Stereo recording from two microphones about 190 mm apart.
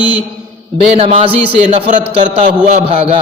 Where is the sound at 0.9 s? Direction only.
30° right (ahead or behind).